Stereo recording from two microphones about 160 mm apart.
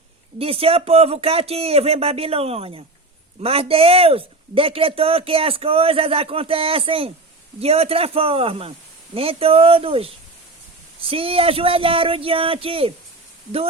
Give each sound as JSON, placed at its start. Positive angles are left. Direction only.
{"t": 0.3, "sound": "speech", "side_deg": -35}